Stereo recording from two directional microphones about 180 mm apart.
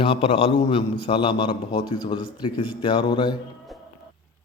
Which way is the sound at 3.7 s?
Centre (ahead or behind).